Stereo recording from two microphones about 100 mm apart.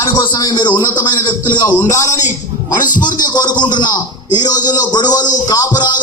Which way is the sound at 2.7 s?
45° left (ahead or behind).